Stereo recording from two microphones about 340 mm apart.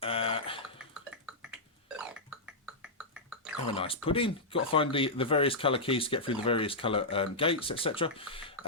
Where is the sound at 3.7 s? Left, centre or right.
Centre.